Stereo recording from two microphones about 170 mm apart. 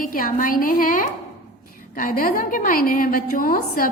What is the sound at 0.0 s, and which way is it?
A woman's voice, 55° left (ahead or behind).